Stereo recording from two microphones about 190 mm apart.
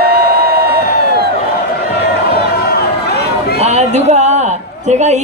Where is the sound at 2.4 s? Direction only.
55° left (ahead or behind).